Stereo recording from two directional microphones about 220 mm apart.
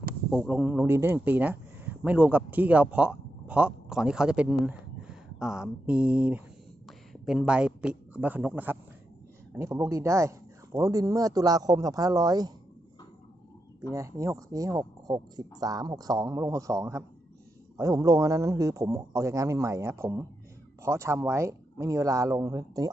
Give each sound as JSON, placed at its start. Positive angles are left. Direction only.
{"t": 0.3, "sound": "speech", "side_deg": -5}
{"t": 13.9, "sound": "speech", "side_deg": -15}